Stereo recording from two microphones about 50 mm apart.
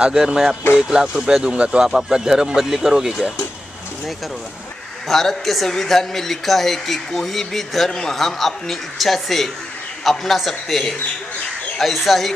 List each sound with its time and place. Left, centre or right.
0.1 s speech: centre
5.0 s speech: centre